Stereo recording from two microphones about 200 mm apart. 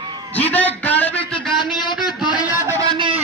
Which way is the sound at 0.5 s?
10° left (ahead or behind).